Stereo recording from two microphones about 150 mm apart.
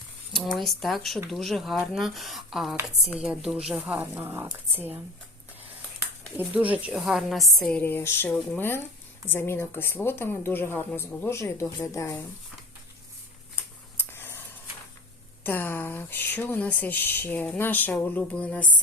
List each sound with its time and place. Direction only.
0.3 s a woman's voice: centre (ahead or behind); by 4.9 s 15° right (ahead or behind)
6.3 s speech: 10° right (ahead or behind); by 12.2 s 20° left (ahead or behind)
13.9 s scissors: 15° left (ahead or behind)
15.4 s speech: 15° left (ahead or behind)